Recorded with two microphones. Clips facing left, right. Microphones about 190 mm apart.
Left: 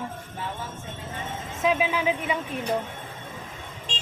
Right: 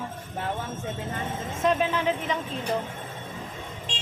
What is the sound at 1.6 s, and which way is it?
Speech, 5° left (ahead or behind).